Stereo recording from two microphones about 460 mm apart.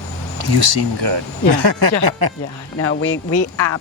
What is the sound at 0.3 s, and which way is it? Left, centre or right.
Speech, right.